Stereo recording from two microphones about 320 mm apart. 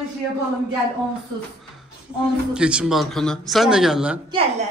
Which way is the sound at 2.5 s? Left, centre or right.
Centre.